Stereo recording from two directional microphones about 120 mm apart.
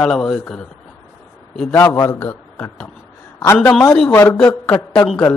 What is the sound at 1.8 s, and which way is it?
Speech, 20° left (ahead or behind).